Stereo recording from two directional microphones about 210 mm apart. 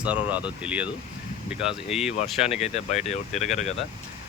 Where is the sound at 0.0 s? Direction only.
5° right (ahead or behind).